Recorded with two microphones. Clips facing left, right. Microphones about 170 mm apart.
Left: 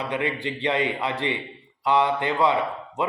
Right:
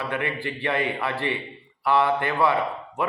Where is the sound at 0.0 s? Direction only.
20° left (ahead or behind).